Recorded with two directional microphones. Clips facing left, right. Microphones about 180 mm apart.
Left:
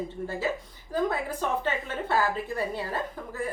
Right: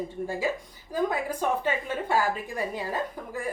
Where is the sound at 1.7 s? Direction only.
10° right (ahead or behind).